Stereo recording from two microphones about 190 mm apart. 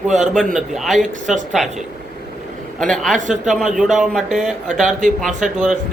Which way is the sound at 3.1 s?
40° right (ahead or behind).